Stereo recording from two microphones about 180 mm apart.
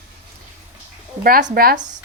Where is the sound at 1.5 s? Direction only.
55° right (ahead or behind).